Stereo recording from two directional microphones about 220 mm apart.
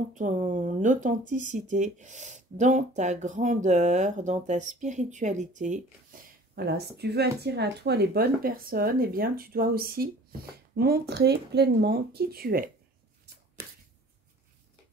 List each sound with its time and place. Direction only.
0.1 s speech: 35° right (ahead or behind)